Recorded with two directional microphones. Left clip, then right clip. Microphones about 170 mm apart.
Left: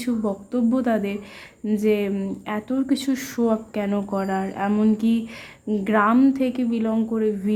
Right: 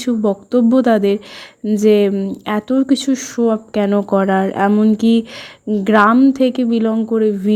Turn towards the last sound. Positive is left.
turn(degrees=-40)  # may be behind; listen again after turning